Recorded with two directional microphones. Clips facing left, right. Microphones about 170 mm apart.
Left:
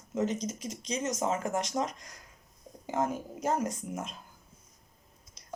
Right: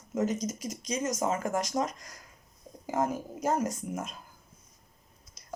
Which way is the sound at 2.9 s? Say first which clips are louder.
Right 1 dB; 30° right (ahead or behind).